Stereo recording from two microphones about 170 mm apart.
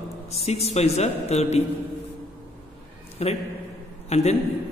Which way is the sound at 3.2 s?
40° left (ahead or behind).